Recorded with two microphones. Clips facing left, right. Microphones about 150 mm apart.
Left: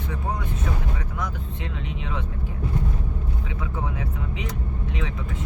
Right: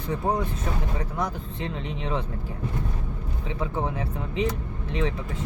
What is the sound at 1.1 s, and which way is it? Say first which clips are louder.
Speech: right 2 dB; 35° right (ahead or behind).